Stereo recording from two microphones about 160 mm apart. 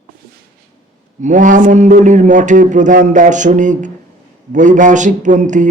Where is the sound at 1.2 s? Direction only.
50° right (ahead or behind).